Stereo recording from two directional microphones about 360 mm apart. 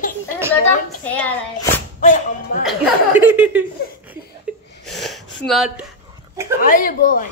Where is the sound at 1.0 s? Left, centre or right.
Centre.